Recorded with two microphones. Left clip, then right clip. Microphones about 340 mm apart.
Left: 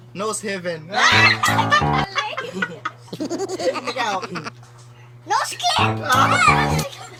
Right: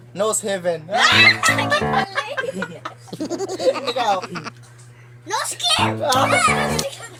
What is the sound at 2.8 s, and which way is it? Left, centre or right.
Speech, centre.